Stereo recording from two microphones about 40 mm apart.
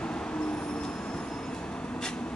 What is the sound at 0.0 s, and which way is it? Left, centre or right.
Vehicle, left.